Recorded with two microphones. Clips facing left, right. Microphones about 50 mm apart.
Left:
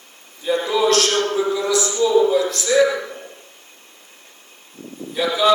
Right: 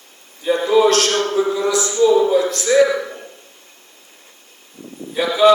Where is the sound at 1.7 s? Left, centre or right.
Right.